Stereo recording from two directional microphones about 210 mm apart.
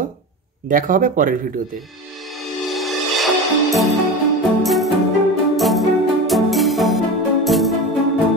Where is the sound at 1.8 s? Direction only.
Centre (ahead or behind).